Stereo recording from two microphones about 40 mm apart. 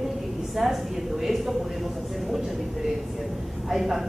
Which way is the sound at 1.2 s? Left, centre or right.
Centre.